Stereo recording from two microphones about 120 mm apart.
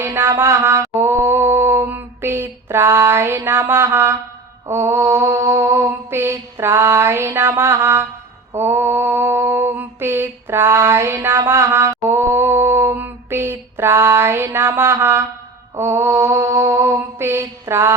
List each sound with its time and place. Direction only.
0.0 s mantra: 20° right (ahead or behind)